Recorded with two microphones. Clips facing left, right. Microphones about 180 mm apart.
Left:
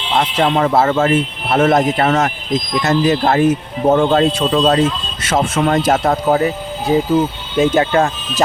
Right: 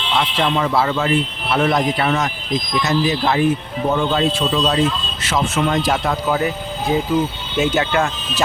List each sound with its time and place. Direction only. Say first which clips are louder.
0.1 s speech: left 4 dB; 45° left (ahead or behind)